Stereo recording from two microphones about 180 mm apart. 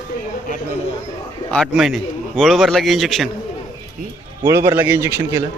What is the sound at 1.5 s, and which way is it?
A man's voice, centre (ahead or behind).